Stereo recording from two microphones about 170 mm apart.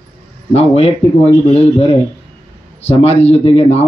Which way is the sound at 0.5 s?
35° left (ahead or behind).